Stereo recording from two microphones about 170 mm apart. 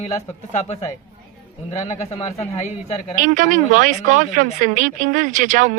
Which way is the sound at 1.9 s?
40° left (ahead or behind).